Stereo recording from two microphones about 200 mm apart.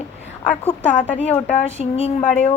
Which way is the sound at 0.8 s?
5° left (ahead or behind).